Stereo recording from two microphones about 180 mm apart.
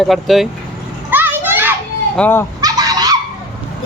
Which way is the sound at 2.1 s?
10° left (ahead or behind).